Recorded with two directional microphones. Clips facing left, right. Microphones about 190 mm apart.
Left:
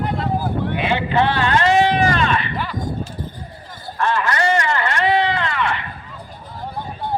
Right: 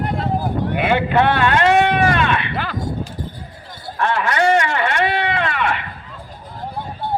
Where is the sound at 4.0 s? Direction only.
65° right (ahead or behind).